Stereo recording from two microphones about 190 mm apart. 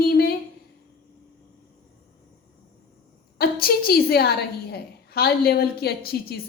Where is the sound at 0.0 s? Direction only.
55° left (ahead or behind).